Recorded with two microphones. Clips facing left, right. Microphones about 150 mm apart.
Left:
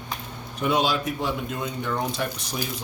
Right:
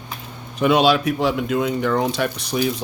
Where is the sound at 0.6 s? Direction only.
80° right.